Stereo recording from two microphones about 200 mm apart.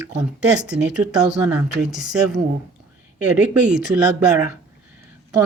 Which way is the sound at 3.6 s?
5° right (ahead or behind).